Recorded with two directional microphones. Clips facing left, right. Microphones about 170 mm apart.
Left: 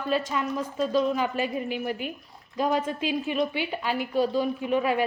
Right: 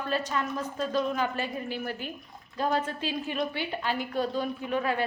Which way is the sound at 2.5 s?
15° left (ahead or behind).